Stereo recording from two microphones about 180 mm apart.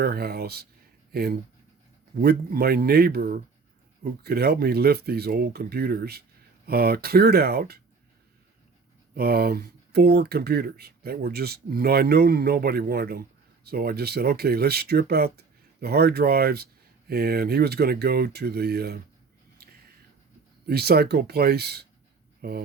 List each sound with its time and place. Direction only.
0.0 s speech: 60° right (ahead or behind)
9.1 s speech: 60° right (ahead or behind)
20.7 s speech: 60° right (ahead or behind)